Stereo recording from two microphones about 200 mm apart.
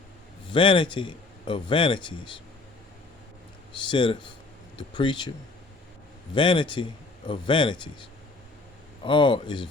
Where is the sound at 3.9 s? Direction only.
25° left (ahead or behind).